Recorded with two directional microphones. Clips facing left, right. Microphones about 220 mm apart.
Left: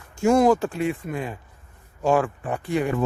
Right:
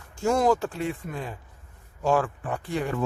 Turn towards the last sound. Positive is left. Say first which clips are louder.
# left 5 dB
turn(degrees=15)  # may be behind; listen again after turning